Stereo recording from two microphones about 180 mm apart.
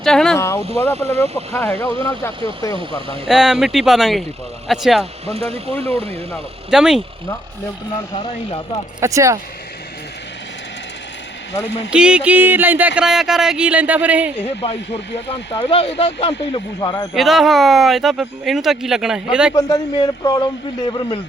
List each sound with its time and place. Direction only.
0.0 s vehicle: 5° left (ahead or behind)
0.3 s vehicle: 15° left (ahead or behind)
0.9 s speech: 35° right (ahead or behind)
1.5 s speech: 10° left (ahead or behind)
3.2 s speech: centre (ahead or behind)
5.3 s speech: 35° right (ahead or behind)
6.3 s speech: 5° right (ahead or behind)
8.3 s a man's voice: 30° left (ahead or behind)
9.0 s speech: 15° right (ahead or behind)
11.9 s speech: 5° right (ahead or behind)
14.4 s a man's voice: 35° left (ahead or behind)
17.2 s speech: centre (ahead or behind)
19.5 s a man's voice: 20° left (ahead or behind)